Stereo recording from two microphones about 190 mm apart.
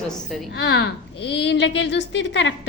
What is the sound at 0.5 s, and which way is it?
A woman's voice, 60° left (ahead or behind).